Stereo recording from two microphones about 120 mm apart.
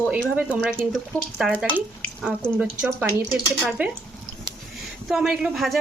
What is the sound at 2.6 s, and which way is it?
A woman's voice, 15° right (ahead or behind).